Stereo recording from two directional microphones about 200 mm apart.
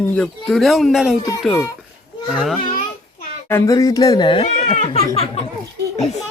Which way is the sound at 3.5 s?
15° left (ahead or behind).